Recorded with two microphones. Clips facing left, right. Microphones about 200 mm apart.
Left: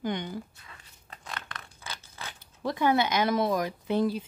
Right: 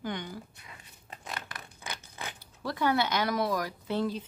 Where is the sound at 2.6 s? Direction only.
20° left (ahead or behind).